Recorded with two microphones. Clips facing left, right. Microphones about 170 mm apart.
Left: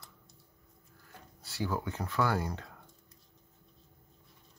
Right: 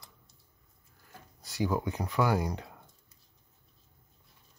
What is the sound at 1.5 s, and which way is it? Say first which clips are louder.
Speech: right 4 dB; 15° right (ahead or behind).